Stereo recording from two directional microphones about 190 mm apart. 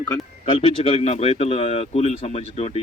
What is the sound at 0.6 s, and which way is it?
Speech, 35° left (ahead or behind).